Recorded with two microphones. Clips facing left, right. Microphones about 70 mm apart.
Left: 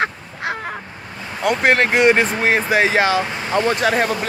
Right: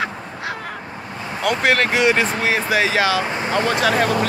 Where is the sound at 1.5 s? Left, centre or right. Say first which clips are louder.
Left 2 dB; left.